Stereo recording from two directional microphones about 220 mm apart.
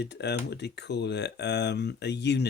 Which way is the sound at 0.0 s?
50° left (ahead or behind).